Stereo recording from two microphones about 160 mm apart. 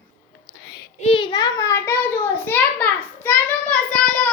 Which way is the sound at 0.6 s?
85° left.